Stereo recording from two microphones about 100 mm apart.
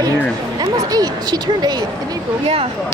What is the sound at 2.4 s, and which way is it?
Speech, 75° right (ahead or behind).